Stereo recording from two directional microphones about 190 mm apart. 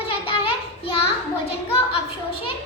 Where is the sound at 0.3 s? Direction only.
30° left (ahead or behind).